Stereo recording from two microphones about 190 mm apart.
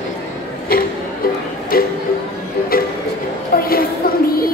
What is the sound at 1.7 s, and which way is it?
Music, 50° left (ahead or behind).